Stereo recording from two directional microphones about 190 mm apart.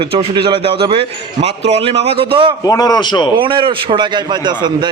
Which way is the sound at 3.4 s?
25° right (ahead or behind).